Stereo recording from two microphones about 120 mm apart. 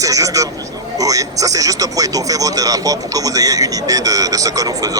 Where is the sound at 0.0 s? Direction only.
30° right (ahead or behind).